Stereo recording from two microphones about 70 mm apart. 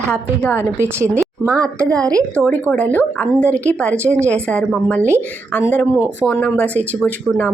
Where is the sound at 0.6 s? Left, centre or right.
Right.